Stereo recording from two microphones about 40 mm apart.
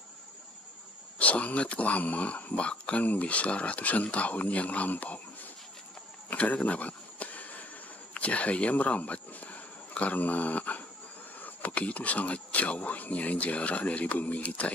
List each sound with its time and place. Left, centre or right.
1.2 s speech: left
6.3 s a sound: left
8.1 s speech: left